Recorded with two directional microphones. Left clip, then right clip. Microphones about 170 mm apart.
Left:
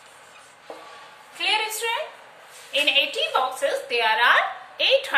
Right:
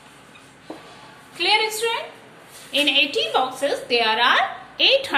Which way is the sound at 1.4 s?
20° right (ahead or behind).